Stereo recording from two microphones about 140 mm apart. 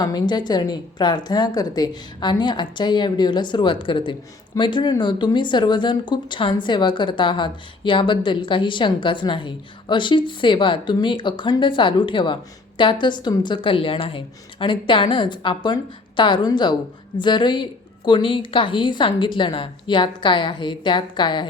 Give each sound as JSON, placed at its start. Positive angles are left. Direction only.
{"t": 0.0, "sound": "speech", "side_deg": 30}